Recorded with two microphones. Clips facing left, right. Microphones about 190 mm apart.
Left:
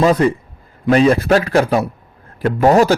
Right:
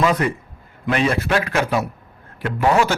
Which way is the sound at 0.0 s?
35° left (ahead or behind).